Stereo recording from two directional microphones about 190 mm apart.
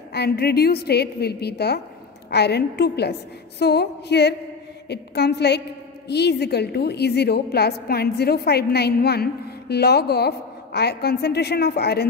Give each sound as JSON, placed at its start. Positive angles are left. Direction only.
{"t": 0.1, "sound": "a woman's voice", "side_deg": 55}